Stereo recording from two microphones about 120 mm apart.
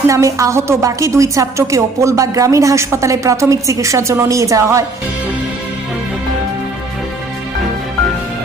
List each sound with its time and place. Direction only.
0.1 s a woman's voice: 25° right (ahead or behind)